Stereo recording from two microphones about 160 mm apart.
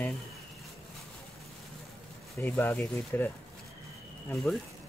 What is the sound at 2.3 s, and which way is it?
Speech, 15° left (ahead or behind).